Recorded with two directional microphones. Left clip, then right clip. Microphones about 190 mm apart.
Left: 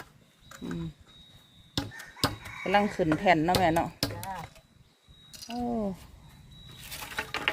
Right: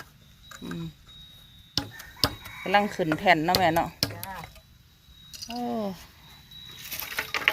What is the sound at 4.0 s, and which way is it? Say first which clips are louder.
Chopping: right 3 dB; 25° left (ahead or behind).